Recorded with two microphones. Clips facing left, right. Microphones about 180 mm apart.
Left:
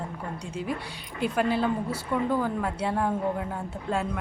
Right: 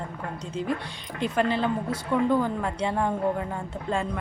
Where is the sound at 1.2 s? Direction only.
10° left (ahead or behind).